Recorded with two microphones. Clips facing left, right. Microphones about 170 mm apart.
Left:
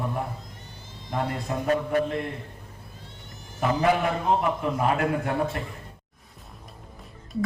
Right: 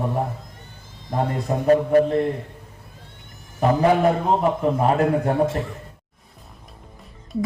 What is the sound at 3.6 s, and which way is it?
A man's voice, 35° right (ahead or behind).